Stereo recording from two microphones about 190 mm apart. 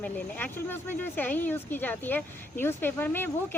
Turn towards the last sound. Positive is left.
turn(degrees=10)  # may be behind; listen again after turning